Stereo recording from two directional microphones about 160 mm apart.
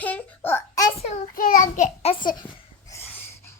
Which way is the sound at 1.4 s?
55° left (ahead or behind).